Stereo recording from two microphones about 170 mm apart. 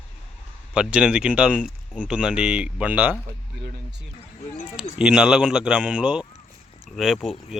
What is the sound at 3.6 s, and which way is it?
Speech, 75° right (ahead or behind).